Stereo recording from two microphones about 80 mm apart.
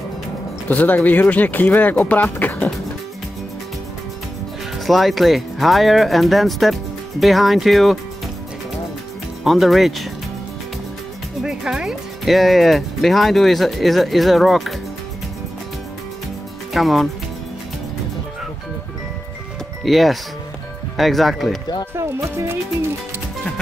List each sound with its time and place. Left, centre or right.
0.7 s speech: left
4.7 s speech: centre
9.4 s speech: centre
11.4 s speech: centre
16.7 s speech: centre
19.8 s speech: centre
21.9 s speech: right